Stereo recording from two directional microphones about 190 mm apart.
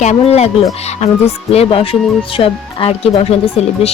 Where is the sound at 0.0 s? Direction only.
35° left (ahead or behind).